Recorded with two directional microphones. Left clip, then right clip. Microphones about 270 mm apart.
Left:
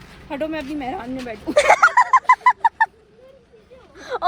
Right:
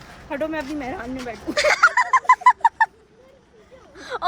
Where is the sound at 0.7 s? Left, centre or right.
Centre.